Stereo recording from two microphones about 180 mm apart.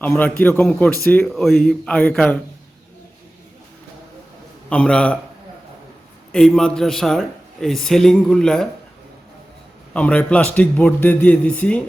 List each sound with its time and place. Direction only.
0.0 s a man's voice: 5° left (ahead or behind)
4.7 s a man's voice: 5° left (ahead or behind)
6.3 s a man's voice: 5° left (ahead or behind)
9.9 s a man's voice: 5° left (ahead or behind)